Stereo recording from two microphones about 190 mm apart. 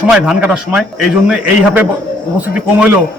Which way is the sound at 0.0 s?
5° right (ahead or behind).